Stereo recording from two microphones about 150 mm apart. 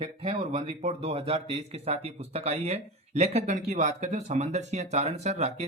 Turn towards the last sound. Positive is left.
turn(degrees=-50)  # may be behind; listen again after turning